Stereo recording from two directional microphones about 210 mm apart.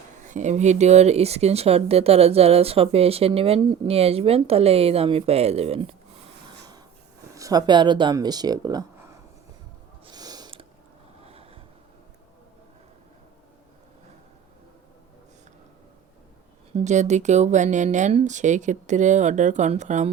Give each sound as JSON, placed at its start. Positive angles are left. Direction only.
{"t": 0.2, "sound": "speech", "side_deg": -35}
{"t": 7.3, "sound": "speech", "side_deg": -15}
{"t": 10.1, "sound": "a sound", "side_deg": -20}
{"t": 11.3, "sound": "vehicle", "side_deg": -30}
{"t": 16.7, "sound": "speech", "side_deg": -35}